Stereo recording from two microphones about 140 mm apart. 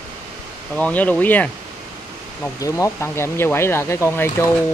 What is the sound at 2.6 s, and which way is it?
Speech, 20° left (ahead or behind).